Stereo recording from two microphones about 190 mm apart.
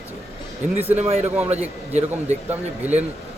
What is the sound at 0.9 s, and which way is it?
Speech, 35° right (ahead or behind).